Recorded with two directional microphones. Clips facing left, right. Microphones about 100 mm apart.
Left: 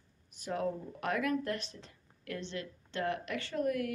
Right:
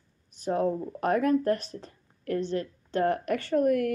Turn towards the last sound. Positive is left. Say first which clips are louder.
# right 9 dB
turn(degrees=-50)  # may be behind; listen again after turning